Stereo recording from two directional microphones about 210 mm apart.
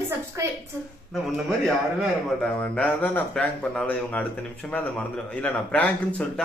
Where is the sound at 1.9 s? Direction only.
5° left (ahead or behind).